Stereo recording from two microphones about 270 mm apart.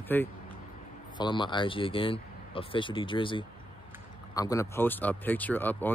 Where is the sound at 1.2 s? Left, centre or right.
Centre.